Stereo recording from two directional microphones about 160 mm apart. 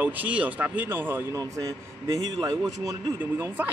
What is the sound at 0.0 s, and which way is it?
Speech, 10° right (ahead or behind).